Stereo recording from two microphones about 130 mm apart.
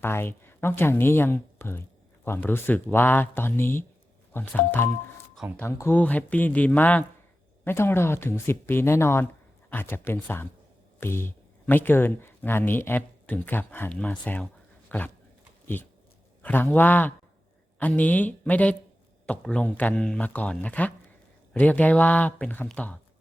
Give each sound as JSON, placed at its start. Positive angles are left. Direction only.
{"t": 0.0, "sound": "speech", "side_deg": 15}
{"t": 14.8, "sound": "dog", "side_deg": 15}
{"t": 15.6, "sound": "speech", "side_deg": 15}